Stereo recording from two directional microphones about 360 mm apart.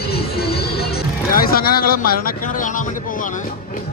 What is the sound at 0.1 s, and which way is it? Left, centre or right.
Music, left.